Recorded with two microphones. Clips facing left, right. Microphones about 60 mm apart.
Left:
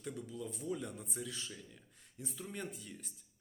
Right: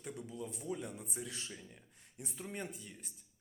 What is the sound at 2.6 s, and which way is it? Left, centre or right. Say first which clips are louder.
Speech: even; centre.